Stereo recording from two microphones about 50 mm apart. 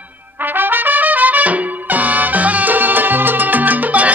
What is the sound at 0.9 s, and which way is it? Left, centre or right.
Trumpet, right.